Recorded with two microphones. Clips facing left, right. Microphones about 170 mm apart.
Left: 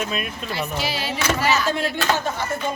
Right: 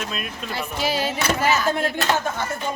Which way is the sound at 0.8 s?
45° right (ahead or behind).